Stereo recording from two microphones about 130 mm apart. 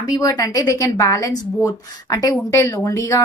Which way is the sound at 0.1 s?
25° left (ahead or behind).